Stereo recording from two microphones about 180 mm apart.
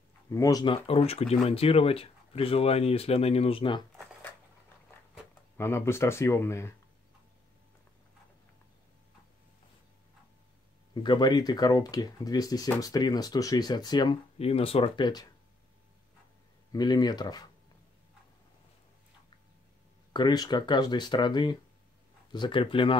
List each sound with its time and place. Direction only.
0.3 s speech: 20° left (ahead or behind)
5.6 s speech: 15° left (ahead or behind)
11.0 s speech: 25° left (ahead or behind)
16.7 s speech: 20° left (ahead or behind)
20.1 s speech: 25° left (ahead or behind)